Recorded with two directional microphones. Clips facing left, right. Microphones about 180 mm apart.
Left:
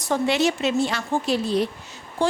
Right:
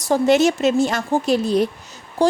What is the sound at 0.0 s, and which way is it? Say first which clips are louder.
A woman's voice: right 6 dB; 40° right (ahead or behind).